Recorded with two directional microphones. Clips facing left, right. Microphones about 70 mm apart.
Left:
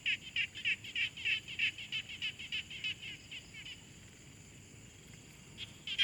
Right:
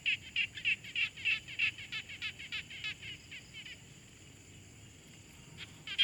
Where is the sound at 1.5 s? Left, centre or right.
Right.